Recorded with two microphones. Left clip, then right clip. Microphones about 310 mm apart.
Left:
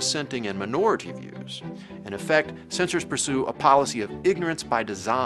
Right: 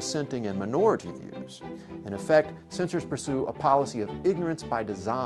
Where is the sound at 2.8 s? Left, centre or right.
Right.